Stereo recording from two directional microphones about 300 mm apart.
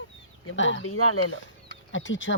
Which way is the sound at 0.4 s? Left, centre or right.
Left.